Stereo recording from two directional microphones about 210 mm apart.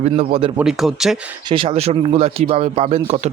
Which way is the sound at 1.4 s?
25° right (ahead or behind).